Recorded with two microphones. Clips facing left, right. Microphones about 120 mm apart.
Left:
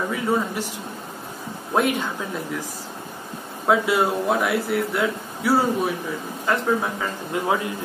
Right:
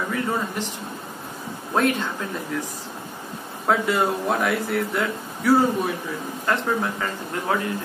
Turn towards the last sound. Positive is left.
turn(degrees=5)  # may be behind; listen again after turning